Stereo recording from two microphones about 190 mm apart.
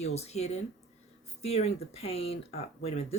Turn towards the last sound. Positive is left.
turn(degrees=30)  # may be behind; listen again after turning